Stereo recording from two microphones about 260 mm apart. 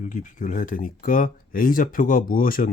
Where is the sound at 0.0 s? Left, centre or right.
Left.